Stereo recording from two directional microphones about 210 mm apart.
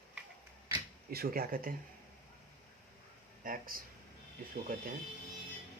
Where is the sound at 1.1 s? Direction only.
45° right (ahead or behind).